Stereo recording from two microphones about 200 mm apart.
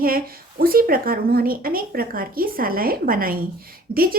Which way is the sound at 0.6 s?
45° right (ahead or behind).